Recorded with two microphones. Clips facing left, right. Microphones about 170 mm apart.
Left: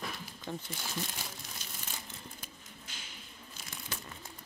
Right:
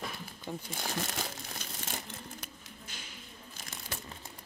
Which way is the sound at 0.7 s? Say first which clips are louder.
Right 3 dB; 60° right (ahead or behind).